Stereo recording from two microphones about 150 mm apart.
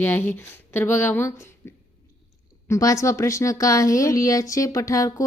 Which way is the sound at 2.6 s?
20° left (ahead or behind).